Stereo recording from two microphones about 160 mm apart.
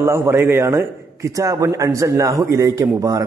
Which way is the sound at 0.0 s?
20° right (ahead or behind).